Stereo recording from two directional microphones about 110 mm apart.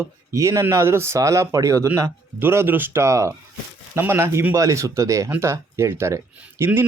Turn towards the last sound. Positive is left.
turn(degrees=-15)  # may be behind; listen again after turning